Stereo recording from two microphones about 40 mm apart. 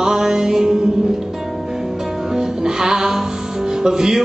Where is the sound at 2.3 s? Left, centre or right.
Centre.